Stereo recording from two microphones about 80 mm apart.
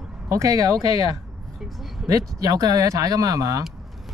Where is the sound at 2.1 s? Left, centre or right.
Right.